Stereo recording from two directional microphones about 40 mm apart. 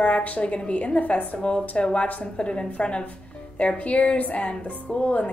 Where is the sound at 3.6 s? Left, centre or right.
Left.